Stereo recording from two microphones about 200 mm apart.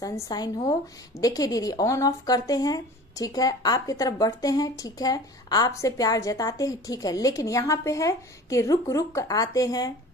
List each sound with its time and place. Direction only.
0.0 s speech: 20° left (ahead or behind)